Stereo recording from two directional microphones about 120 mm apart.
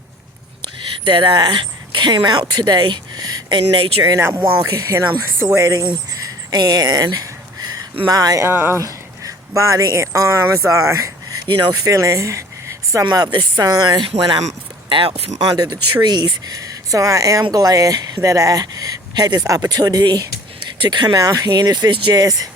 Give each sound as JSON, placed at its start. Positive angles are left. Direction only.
{"t": 0.6, "sound": "speech", "side_deg": -40}
{"t": 3.6, "sound": "speech", "side_deg": -55}
{"t": 4.0, "sound": "speech", "side_deg": -25}
{"t": 6.5, "sound": "a sound", "side_deg": -30}
{"t": 8.0, "sound": "speech", "side_deg": -30}
{"t": 8.4, "sound": "speech", "side_deg": -20}
{"t": 14.8, "sound": "speech", "side_deg": -45}
{"t": 15.4, "sound": "speech", "side_deg": -35}